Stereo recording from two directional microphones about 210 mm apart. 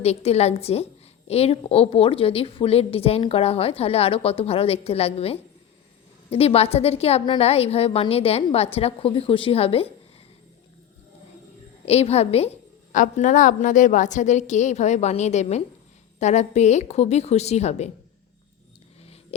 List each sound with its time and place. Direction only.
0.0 s a woman's voice: 30° left (ahead or behind)
11.9 s a woman's voice: 30° left (ahead or behind)